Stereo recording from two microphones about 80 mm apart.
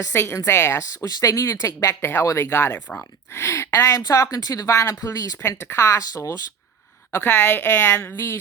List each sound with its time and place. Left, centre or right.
0.1 s speech: left
1.0 s speech: left
5.4 s speech: left
7.1 s a woman's voice: left